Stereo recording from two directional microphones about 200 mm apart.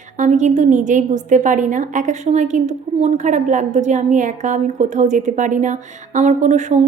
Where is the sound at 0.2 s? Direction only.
35° right (ahead or behind).